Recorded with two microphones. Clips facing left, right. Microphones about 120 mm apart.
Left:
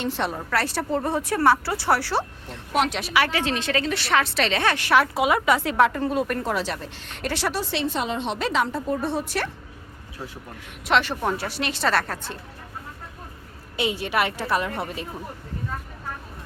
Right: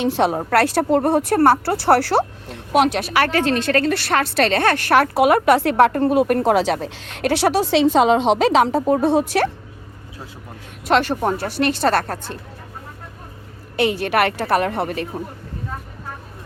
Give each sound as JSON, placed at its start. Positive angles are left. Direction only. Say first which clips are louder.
{"t": 0.0, "sound": "a woman's voice", "louder": "right 8 dB", "side_deg": -80}
{"t": 10.8, "sound": "a woman's voice", "louder": "right 5 dB", "side_deg": -45}
{"t": 13.7, "sound": "speech", "louder": "right 6 dB", "side_deg": -65}